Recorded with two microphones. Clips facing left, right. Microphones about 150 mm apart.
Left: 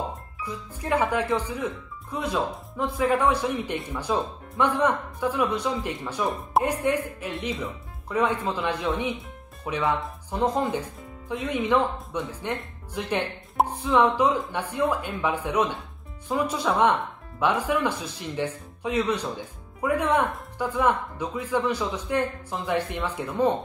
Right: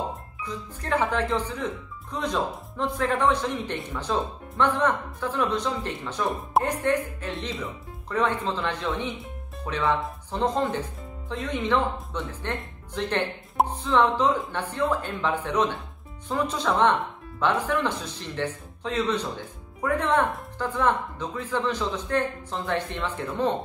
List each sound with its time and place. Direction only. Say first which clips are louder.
0.5 s a man's voice: left 1 dB; 10° left (ahead or behind)